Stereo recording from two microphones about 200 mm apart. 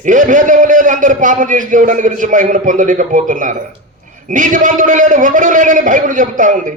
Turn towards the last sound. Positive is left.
turn(degrees=-40)  # may be behind; listen again after turning